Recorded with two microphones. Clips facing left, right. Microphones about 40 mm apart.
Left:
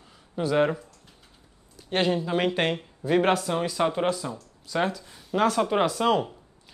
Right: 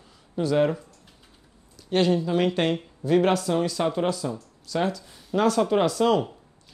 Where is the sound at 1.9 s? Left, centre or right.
Centre.